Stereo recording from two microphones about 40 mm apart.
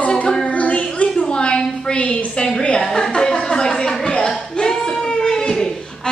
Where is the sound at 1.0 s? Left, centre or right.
Left.